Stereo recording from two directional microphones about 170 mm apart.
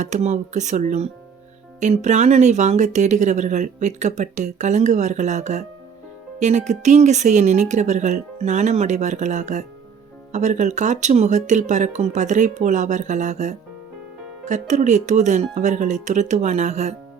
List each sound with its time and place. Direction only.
0.0 s speech: 45° right (ahead or behind)